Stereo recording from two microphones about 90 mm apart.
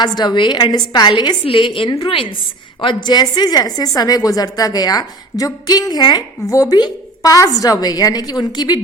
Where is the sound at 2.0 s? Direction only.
80° left.